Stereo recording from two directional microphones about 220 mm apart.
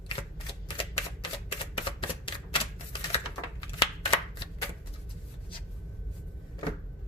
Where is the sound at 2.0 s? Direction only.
20° left (ahead or behind).